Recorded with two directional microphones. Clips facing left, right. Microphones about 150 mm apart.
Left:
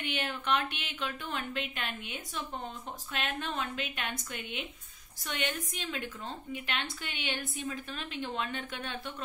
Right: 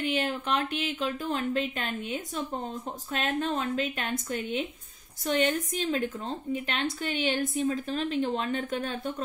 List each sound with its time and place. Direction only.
0.1 s speech: 40° right (ahead or behind)